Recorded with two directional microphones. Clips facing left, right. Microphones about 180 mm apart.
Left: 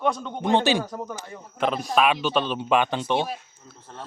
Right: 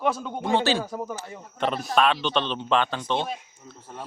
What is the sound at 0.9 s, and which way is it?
A man's voice, 10° right (ahead or behind).